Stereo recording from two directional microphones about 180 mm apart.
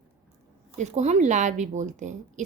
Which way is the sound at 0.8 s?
40° right (ahead or behind).